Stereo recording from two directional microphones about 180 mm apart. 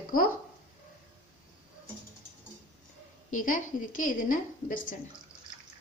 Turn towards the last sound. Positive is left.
turn(degrees=50)  # may be behind; listen again after turning